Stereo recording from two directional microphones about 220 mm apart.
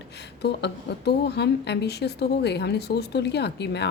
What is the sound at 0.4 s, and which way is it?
A woman's voice, 50° left (ahead or behind).